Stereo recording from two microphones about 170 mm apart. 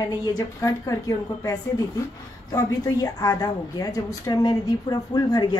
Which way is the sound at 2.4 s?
20° left (ahead or behind).